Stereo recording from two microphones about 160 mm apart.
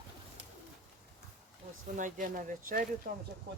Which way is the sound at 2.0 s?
55° right (ahead or behind).